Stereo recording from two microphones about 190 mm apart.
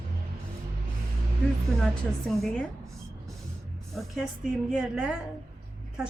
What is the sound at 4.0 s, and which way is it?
A woman's voice, centre (ahead or behind).